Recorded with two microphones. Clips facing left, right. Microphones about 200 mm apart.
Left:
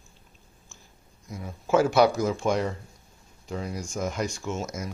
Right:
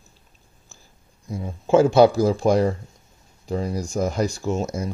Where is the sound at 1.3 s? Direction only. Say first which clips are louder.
Right 6 dB; 30° right (ahead or behind).